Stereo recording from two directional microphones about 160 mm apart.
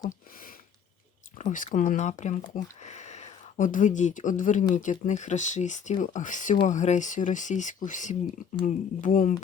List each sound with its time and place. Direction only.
1.4 s speech: 50° left (ahead or behind)